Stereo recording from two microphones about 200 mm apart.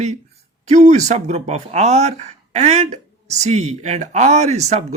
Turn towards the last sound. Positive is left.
turn(degrees=-35)  # may be behind; listen again after turning